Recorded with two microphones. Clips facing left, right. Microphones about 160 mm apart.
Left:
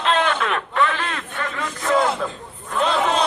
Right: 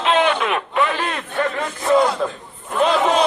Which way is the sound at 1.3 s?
40° right (ahead or behind).